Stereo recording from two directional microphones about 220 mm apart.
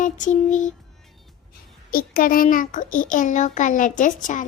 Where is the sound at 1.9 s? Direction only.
40° left (ahead or behind).